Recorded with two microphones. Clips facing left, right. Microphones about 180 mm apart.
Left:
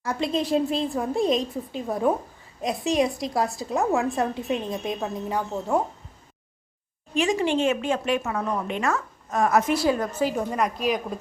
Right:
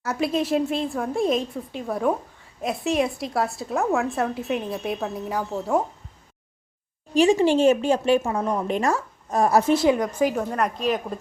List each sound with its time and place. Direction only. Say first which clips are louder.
0.0 s a woman's voice: right 2 dB; 5° right (ahead or behind)
7.1 s a woman's voice: right 5 dB; 30° right (ahead or behind); by 10.3 s 15° right (ahead or behind)
10.3 s a woman's voice: right 1 dB; 5° left (ahead or behind)